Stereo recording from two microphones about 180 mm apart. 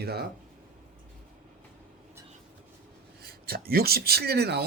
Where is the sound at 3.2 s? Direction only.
60° right (ahead or behind).